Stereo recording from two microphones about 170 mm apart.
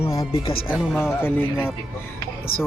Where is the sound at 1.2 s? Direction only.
10° left (ahead or behind).